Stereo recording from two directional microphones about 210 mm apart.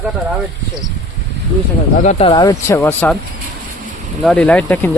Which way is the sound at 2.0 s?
30° left (ahead or behind).